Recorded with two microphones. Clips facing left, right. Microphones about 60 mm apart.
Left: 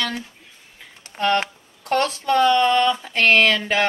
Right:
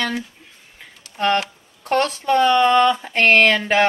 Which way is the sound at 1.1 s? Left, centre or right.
Left.